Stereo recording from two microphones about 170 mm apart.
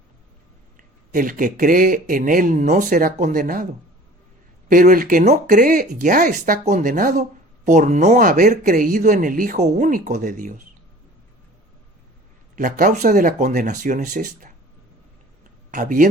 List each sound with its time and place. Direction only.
1.1 s speech: 50° right (ahead or behind)
4.7 s speech: 55° right (ahead or behind)
12.5 s speech: 50° right (ahead or behind)
15.7 s speech: 50° right (ahead or behind)